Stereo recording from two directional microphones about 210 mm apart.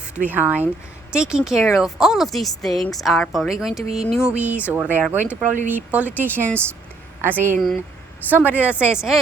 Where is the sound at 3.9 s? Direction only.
30° right (ahead or behind).